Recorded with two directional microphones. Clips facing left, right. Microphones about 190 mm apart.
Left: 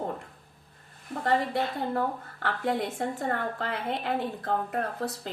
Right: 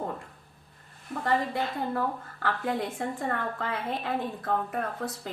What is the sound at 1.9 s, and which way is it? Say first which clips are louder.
Speech: left 1 dB; 25° left (ahead or behind).